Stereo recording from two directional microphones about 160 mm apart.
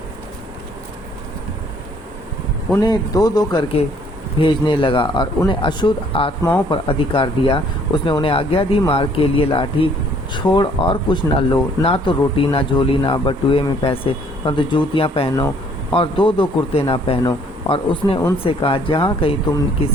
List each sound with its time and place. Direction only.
2.8 s a man's voice: 25° left (ahead or behind)